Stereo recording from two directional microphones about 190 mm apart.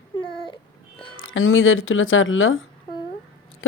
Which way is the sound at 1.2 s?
90° left.